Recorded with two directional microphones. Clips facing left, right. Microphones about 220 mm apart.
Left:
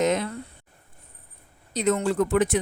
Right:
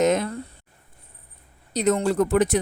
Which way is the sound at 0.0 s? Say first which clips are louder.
Right 3 dB; 45° right (ahead or behind).